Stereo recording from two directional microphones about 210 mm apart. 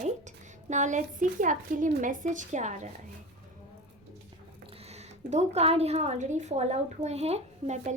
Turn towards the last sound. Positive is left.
turn(degrees=-30)  # may be behind; listen again after turning